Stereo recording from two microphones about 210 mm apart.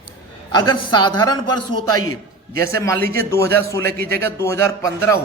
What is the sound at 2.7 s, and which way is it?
A man's voice, 15° left (ahead or behind).